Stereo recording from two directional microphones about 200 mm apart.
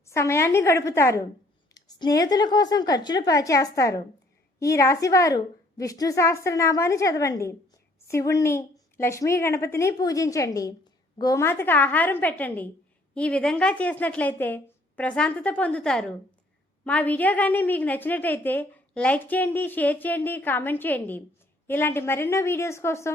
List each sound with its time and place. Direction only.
0.0 s a woman's voice: 15° left (ahead or behind)